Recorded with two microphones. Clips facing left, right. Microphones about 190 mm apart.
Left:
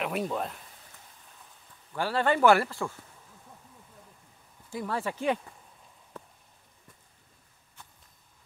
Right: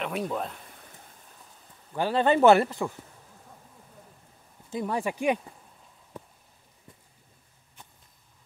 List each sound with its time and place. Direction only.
0.0 s speech: centre (ahead or behind)
2.0 s speech: 20° right (ahead or behind)
4.6 s speech: 20° right (ahead or behind)